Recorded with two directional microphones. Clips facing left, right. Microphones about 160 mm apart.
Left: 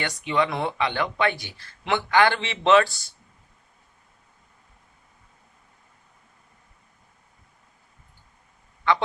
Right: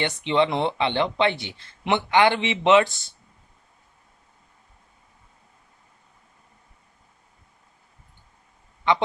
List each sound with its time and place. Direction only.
0.0 s speech: 25° right (ahead or behind)
8.8 s honk: 20° right (ahead or behind)